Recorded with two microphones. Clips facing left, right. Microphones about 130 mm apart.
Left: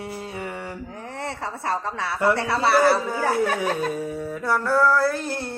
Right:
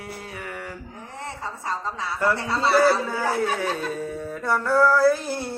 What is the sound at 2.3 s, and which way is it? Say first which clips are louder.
Speech: left 1 dB; 70° left (ahead or behind).